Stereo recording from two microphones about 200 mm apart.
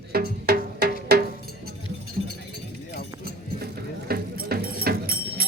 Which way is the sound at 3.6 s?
50° right (ahead or behind).